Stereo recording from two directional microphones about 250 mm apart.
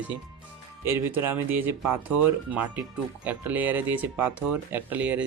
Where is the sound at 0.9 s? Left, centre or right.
Centre.